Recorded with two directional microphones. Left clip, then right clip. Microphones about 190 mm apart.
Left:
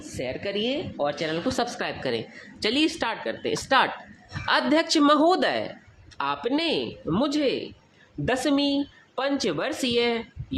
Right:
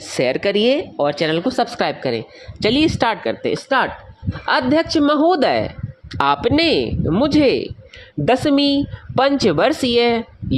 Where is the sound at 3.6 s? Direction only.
25° right (ahead or behind).